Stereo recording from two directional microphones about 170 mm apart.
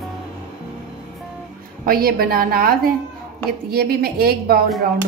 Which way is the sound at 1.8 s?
60° right (ahead or behind).